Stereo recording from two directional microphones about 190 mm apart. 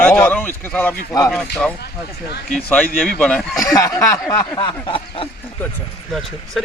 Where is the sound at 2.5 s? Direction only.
5° left (ahead or behind).